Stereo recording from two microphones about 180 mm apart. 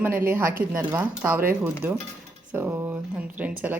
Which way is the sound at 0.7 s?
10° right (ahead or behind).